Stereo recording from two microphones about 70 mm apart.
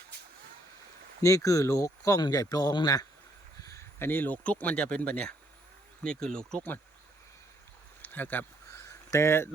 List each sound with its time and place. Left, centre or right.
1.2 s speech: left
2.2 s speech: left
3.9 s speech: left; by 6.6 s centre
8.0 s speech: left
8.8 s a sound: left